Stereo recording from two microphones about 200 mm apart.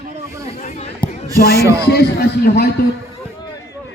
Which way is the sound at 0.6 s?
35° left (ahead or behind).